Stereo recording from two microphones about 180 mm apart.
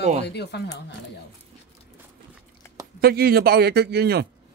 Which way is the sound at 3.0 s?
60° right (ahead or behind).